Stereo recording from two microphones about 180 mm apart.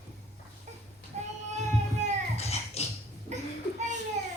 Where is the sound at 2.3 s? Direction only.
35° left (ahead or behind).